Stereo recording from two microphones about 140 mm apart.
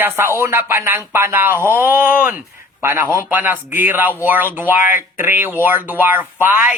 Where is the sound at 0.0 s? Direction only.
15° right (ahead or behind).